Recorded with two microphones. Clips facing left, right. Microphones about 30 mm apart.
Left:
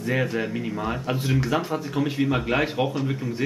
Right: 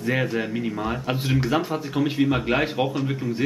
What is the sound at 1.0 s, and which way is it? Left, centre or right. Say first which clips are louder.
Speech: right 1 dB; centre.